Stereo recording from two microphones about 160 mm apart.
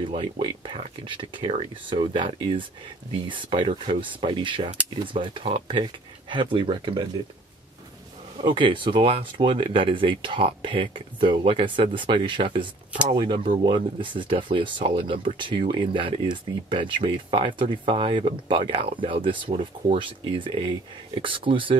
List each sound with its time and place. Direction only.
0.0 s speech: 30° right (ahead or behind)
8.4 s speech: 30° right (ahead or behind)